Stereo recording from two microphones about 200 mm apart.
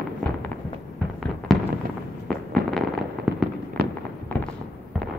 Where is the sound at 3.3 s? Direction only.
5° right (ahead or behind).